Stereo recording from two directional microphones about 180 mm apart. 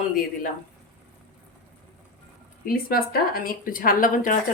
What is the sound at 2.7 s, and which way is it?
A woman's voice, 55° left (ahead or behind).